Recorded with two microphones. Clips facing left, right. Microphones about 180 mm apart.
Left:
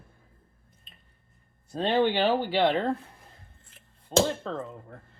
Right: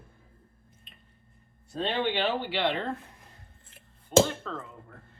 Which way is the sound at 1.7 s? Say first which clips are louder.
Left 5 dB; 40° left (ahead or behind).